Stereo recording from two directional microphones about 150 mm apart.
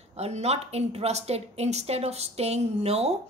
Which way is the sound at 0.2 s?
45° right (ahead or behind).